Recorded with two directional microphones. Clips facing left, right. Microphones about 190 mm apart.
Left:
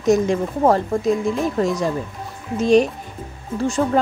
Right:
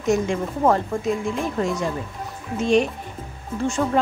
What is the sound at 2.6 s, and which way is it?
Speech, 40° left (ahead or behind).